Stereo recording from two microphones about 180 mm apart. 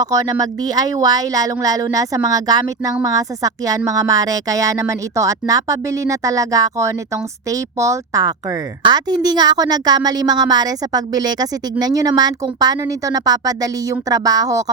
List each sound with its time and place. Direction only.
0.0 s a woman's voice: 20° right (ahead or behind)